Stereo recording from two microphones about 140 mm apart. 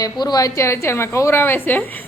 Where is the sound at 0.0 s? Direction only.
30° left (ahead or behind).